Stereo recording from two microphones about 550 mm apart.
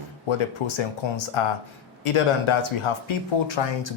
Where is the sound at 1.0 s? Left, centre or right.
Left.